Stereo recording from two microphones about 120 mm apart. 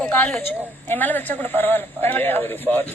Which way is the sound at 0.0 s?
10° left (ahead or behind).